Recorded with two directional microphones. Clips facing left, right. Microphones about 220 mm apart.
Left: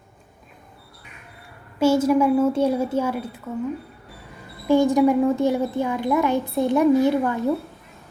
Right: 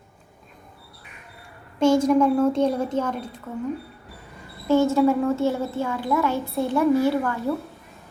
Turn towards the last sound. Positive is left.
turn(degrees=20)  # may be behind; listen again after turning